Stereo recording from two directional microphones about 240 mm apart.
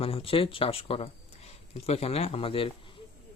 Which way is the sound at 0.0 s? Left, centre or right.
Left.